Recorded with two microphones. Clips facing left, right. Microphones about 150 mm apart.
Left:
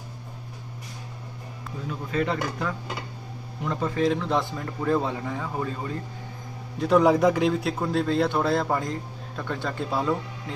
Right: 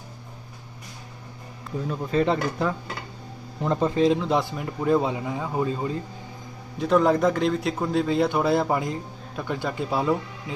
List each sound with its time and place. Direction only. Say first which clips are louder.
1.9 s a man's voice: right 4 dB; 30° right (ahead or behind)
6.7 s a man's voice: left 1 dB; centre (ahead or behind)